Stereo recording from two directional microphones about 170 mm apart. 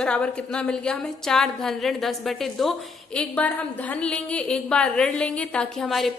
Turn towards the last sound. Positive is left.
turn(degrees=0)  # may be behind; listen again after turning